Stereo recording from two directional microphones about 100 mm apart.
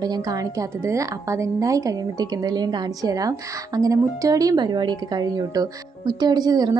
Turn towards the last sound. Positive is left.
turn(degrees=-45)  # may be behind; listen again after turning